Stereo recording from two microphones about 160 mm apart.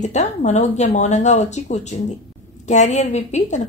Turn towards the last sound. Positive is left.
turn(degrees=45)  # may be behind; listen again after turning